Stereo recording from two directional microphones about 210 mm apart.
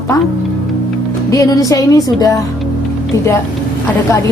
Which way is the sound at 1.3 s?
15° left (ahead or behind).